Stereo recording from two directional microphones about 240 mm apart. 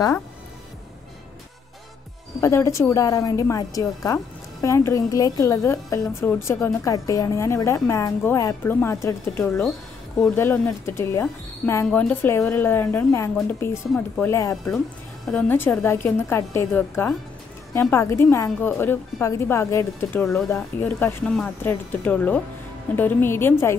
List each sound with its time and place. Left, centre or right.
2.4 s a woman's voice: centre